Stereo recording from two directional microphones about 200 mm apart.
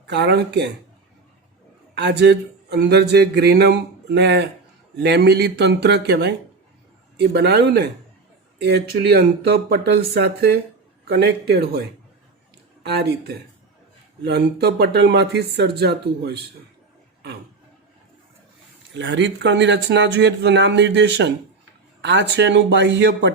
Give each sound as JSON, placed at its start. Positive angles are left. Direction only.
{"t": 0.1, "sound": "speech", "side_deg": -55}
{"t": 2.0, "sound": "speech", "side_deg": -55}
{"t": 12.8, "sound": "speech", "side_deg": -55}
{"t": 18.9, "sound": "speech", "side_deg": -65}